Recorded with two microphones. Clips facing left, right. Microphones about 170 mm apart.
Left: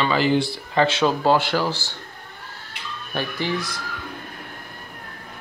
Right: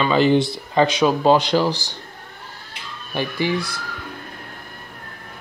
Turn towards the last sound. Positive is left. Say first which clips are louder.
# right 3 dB
turn(degrees=-10)  # may be behind; listen again after turning